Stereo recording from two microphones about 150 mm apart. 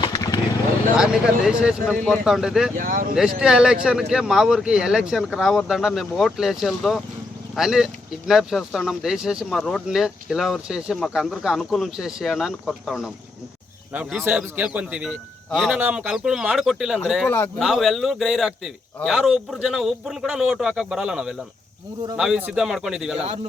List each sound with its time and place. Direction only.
0.0 s a sound: 25° left (ahead or behind)
0.9 s speech: 5° right (ahead or behind)
2.7 s speech: 65° right (ahead or behind)
3.2 s speech: 5° right (ahead or behind)
17.2 s speech: 15° left (ahead or behind)
17.6 s speech: centre (ahead or behind)